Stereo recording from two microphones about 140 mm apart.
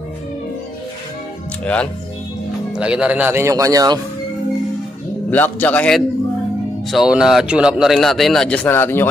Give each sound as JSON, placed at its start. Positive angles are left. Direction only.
{"t": 1.6, "sound": "a man's voice", "side_deg": 10}
{"t": 2.7, "sound": "speech", "side_deg": -5}
{"t": 5.3, "sound": "a man's voice", "side_deg": 10}
{"t": 6.9, "sound": "a man's voice", "side_deg": -5}
{"t": 8.6, "sound": "a man's voice", "side_deg": 15}